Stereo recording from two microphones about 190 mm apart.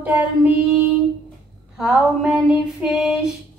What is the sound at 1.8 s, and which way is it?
Female singing, 5° right (ahead or behind).